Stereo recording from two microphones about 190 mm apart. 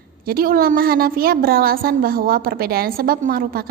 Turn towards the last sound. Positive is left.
turn(degrees=-50)  # may be behind; listen again after turning